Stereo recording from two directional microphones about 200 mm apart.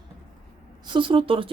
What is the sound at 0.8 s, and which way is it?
Speech, 25° right (ahead or behind).